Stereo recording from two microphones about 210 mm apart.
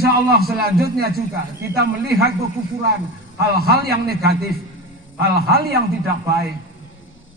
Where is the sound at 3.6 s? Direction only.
45° right (ahead or behind).